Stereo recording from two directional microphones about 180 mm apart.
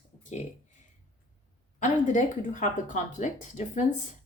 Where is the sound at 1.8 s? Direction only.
45° left (ahead or behind).